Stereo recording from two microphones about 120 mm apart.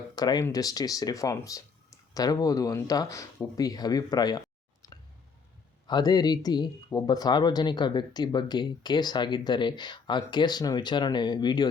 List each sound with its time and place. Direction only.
0.2 s speech: 35° left (ahead or behind)
5.9 s speech: 35° left (ahead or behind)